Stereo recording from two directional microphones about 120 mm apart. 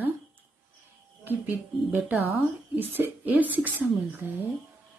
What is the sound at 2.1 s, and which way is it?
Speech, 15° right (ahead or behind).